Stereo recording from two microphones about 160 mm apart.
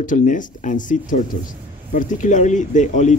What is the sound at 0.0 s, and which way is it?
Speech, 55° left (ahead or behind).